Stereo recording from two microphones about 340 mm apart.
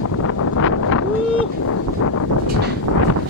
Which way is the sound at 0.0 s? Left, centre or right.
Left.